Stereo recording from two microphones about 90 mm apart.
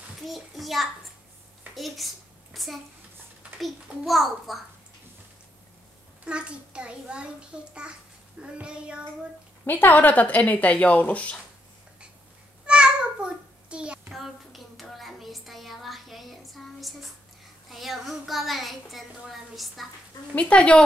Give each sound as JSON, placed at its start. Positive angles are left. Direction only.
{"t": 0.3, "sound": "a child's voice", "side_deg": 0}
{"t": 6.2, "sound": "a child's voice", "side_deg": -10}
{"t": 9.7, "sound": "speech", "side_deg": 20}
{"t": 12.6, "sound": "a sound", "side_deg": -10}
{"t": 14.1, "sound": "a child's voice", "side_deg": 0}
{"t": 20.3, "sound": "speech", "side_deg": 15}